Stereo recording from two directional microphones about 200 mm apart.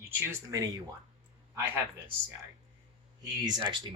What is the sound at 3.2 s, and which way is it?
Speech, 20° right (ahead or behind).